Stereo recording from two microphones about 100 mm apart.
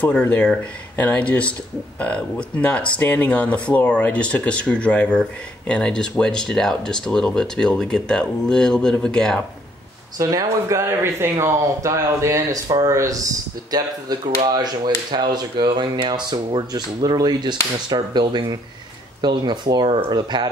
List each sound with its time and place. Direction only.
0.0 s speech: 15° left (ahead or behind)
10.1 s speech: 35° right (ahead or behind)